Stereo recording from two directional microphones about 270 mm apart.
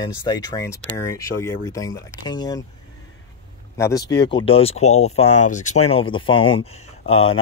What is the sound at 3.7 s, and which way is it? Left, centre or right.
Speech, centre.